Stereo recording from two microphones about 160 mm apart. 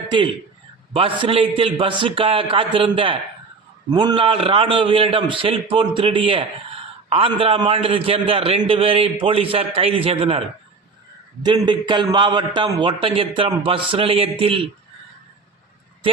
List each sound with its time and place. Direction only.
0.9 s a man's voice: 35° right (ahead or behind)
11.4 s a man's voice: 30° right (ahead or behind)